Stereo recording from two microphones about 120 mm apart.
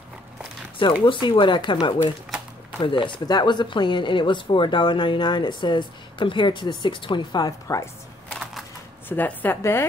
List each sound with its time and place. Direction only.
0.7 s speech: 45° left (ahead or behind); by 7.9 s 25° left (ahead or behind)
9.1 s a woman's voice: 15° left (ahead or behind)